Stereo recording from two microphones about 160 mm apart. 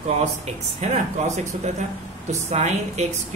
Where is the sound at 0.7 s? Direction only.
45° right (ahead or behind).